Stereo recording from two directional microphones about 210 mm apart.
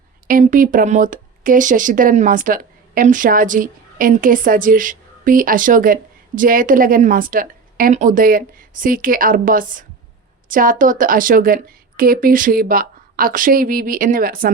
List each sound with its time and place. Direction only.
0.3 s a woman's voice: 40° right (ahead or behind)